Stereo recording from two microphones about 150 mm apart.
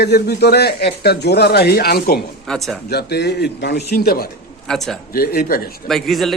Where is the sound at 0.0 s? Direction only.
90° left.